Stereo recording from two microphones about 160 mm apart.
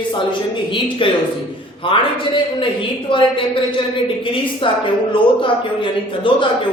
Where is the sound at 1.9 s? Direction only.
30° left (ahead or behind).